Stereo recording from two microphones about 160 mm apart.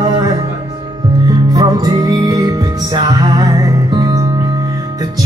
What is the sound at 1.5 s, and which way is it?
Music, 20° right (ahead or behind).